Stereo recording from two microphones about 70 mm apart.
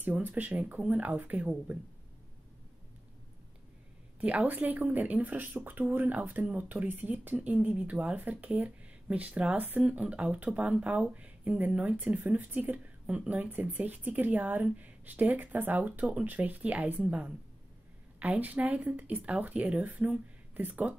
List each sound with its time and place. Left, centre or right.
0.0 s speech: right
4.2 s speech: right